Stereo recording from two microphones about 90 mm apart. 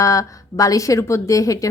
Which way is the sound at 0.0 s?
35° left (ahead or behind).